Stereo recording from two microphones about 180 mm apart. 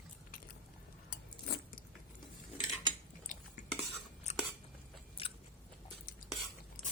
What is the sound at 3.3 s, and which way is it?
Cutlery, 45° left (ahead or behind).